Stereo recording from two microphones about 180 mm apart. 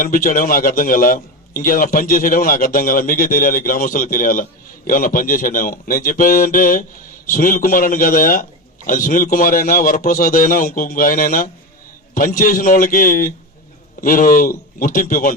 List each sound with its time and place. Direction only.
0.0 s a man's voice: 50° left (ahead or behind)